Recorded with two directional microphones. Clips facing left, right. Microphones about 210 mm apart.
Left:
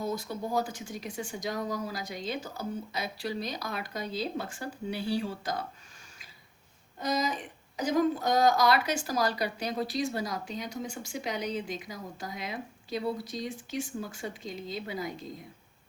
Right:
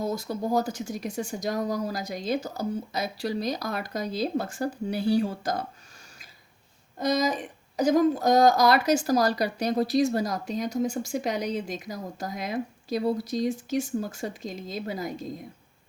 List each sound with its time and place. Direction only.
0.0 s a woman's voice: 40° right (ahead or behind)
7.0 s a woman's voice: 40° right (ahead or behind)